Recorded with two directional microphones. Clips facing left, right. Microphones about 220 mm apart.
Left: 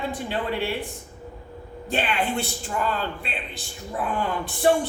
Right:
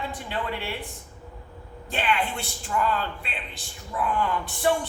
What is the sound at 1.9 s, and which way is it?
A woman's voice, 35° left (ahead or behind).